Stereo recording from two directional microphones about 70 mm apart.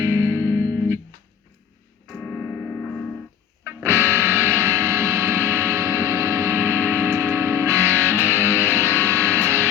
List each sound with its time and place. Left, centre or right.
0.4 s music: left
2.2 s music: centre
3.8 s music: right